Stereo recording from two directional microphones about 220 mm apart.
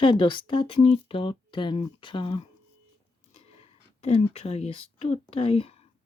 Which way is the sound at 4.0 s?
30° left (ahead or behind).